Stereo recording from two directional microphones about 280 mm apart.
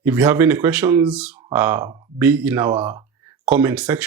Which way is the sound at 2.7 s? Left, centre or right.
Centre.